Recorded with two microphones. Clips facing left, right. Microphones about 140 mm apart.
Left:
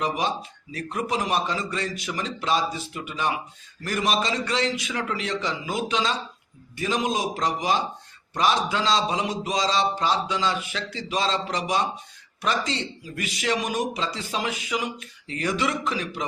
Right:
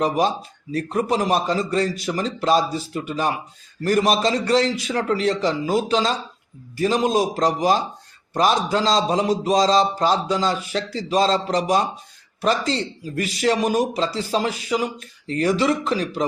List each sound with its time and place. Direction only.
0.7 s a man's voice: 35° right (ahead or behind)